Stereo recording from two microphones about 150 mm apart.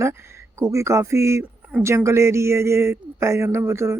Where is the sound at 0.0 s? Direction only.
15° right (ahead or behind).